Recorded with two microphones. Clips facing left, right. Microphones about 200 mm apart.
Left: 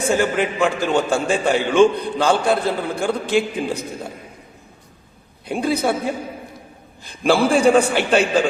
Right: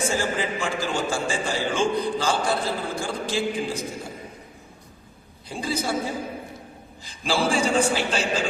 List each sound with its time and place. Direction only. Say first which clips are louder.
0.1 s a man's voice: left 7 dB; 60° left (ahead or behind)
5.5 s a man's voice: left 7 dB; 60° left (ahead or behind)